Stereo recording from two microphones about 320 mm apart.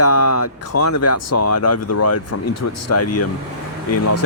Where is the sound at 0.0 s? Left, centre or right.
Left.